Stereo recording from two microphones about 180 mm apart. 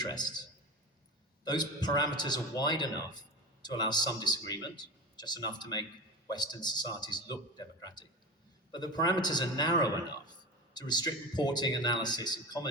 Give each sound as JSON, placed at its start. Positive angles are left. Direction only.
{"t": 0.0, "sound": "a man's voice", "side_deg": 25}
{"t": 1.5, "sound": "speech", "side_deg": 25}
{"t": 10.8, "sound": "speech", "side_deg": 25}